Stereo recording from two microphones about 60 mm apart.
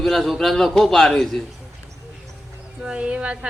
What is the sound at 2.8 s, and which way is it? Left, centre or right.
Speech, centre.